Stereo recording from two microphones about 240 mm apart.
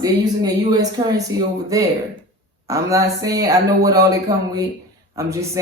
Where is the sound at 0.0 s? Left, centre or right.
Centre.